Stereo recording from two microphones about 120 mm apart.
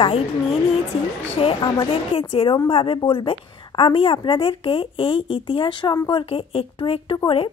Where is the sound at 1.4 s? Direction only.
50° left (ahead or behind).